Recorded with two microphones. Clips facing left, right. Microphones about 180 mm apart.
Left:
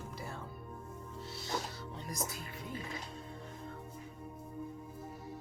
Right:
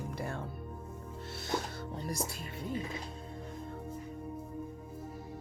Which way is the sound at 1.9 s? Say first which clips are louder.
Right 4 dB; 35° right (ahead or behind).